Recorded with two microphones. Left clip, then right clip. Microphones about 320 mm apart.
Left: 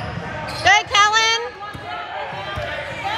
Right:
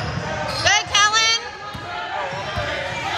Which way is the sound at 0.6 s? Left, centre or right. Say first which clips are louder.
Left 3 dB; centre.